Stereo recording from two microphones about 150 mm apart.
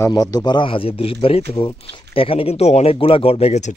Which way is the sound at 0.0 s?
25° left (ahead or behind).